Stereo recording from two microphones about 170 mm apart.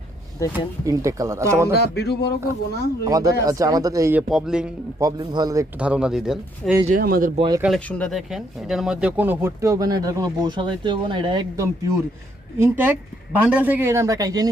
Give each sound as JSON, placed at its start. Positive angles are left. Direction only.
{"t": 0.9, "sound": "a woman's voice", "side_deg": -20}
{"t": 1.7, "sound": "speech", "side_deg": 70}
{"t": 3.0, "sound": "speech", "side_deg": -20}
{"t": 4.2, "sound": "speech", "side_deg": 0}
{"t": 4.9, "sound": "speech", "side_deg": -20}
{"t": 5.8, "sound": "speech", "side_deg": -5}
{"t": 6.8, "sound": "speech", "side_deg": -55}
{"t": 7.3, "sound": "speech", "side_deg": -25}
{"t": 7.9, "sound": "a woman's voice", "side_deg": 5}